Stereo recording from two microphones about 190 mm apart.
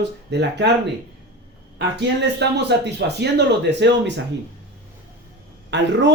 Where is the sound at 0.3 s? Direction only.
65° right (ahead or behind).